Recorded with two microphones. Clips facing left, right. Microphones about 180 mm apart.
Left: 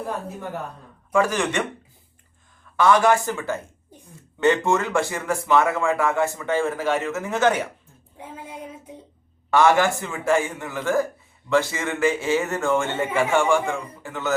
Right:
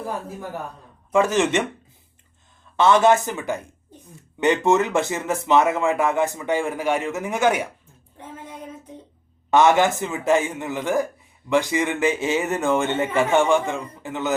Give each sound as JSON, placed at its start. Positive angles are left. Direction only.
{"t": 1.1, "sound": "a man's voice", "side_deg": -20}
{"t": 2.7, "sound": "a man's voice", "side_deg": -25}
{"t": 9.5, "sound": "a man's voice", "side_deg": -20}